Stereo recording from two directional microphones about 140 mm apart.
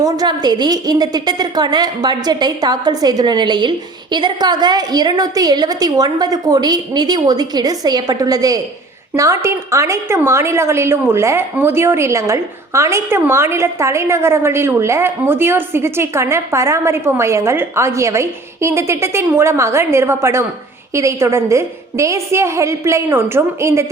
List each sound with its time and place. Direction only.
0.0 s a woman's voice: 30° right (ahead or behind)